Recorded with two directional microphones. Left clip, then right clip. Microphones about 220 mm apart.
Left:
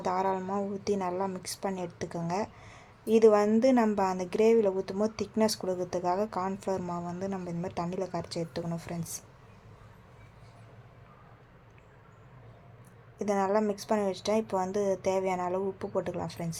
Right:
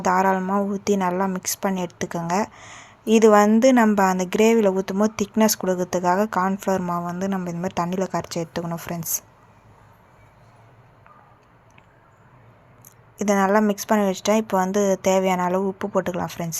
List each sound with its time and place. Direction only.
0.0 s speech: 20° right (ahead or behind)
13.1 s speech: 20° right (ahead or behind)